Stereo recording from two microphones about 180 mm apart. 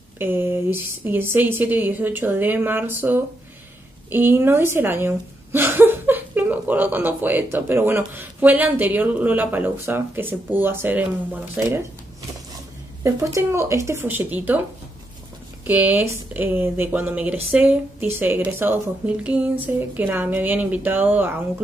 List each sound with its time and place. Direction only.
0.2 s a woman's voice: 10° right (ahead or behind)
13.0 s a woman's voice: 15° right (ahead or behind)
15.6 s a woman's voice: 10° right (ahead or behind)